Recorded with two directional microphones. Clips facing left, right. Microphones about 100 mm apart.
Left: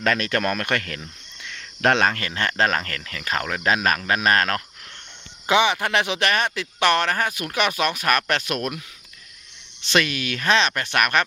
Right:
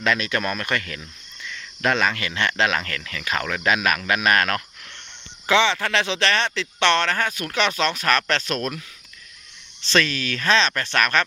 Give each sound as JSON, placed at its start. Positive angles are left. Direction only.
{"t": 0.0, "sound": "speech", "side_deg": 50}
{"t": 2.1, "sound": "speech", "side_deg": 40}
{"t": 5.5, "sound": "speech", "side_deg": 15}
{"t": 9.8, "sound": "speech", "side_deg": 15}